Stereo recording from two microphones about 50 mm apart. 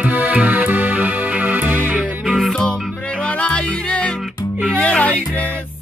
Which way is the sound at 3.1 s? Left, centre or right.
Left.